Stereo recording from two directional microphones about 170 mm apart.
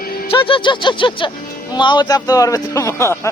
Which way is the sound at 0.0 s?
60° left (ahead or behind).